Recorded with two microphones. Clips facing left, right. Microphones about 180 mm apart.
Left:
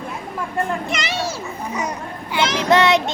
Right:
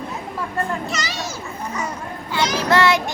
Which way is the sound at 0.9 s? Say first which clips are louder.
Left 3 dB; 25° left (ahead or behind).